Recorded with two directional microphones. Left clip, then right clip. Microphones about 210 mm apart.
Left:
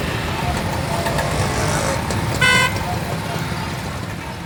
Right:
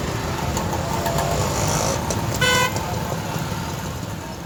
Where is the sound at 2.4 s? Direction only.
50° right (ahead or behind).